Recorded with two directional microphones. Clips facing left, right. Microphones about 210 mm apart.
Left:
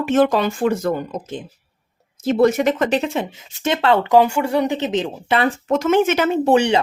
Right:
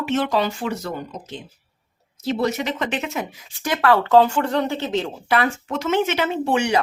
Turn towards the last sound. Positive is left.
turn(degrees=40)  # may be behind; listen again after turning